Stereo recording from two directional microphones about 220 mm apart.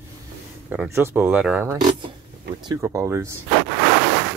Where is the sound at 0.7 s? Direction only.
10° right (ahead or behind).